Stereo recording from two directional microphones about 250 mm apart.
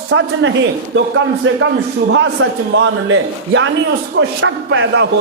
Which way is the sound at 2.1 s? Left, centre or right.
Right.